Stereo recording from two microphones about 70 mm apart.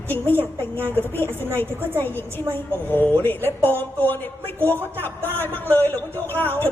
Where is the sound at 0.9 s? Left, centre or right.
Left.